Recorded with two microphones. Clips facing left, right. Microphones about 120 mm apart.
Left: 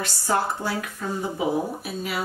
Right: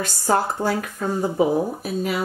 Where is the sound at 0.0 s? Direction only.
40° right (ahead or behind).